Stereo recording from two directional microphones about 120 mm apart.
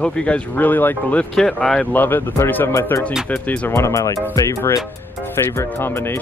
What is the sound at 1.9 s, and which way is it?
Speech, 15° left (ahead or behind).